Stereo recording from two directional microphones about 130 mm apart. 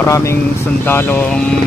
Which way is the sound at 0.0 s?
20° left (ahead or behind).